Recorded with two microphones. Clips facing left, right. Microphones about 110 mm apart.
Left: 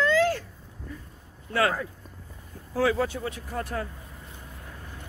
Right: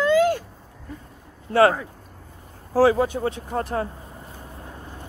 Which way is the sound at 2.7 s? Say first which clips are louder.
Right 7 dB; 30° right (ahead or behind).